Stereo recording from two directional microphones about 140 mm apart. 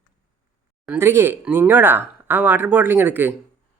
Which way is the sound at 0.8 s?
15° right (ahead or behind).